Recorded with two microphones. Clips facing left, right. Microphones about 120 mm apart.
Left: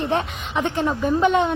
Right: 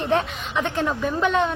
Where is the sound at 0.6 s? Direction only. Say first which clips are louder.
Left 2 dB; 15° left (ahead or behind).